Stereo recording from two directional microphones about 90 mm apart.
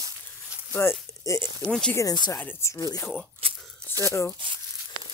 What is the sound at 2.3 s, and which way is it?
Speech, 30° left (ahead or behind).